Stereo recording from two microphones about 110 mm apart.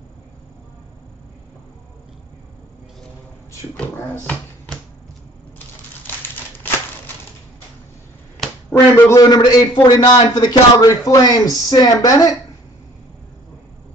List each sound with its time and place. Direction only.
3.7 s speech: 15° left (ahead or behind)
6.0 s a sound: 20° left (ahead or behind)
8.7 s a man's voice: 35° left (ahead or behind)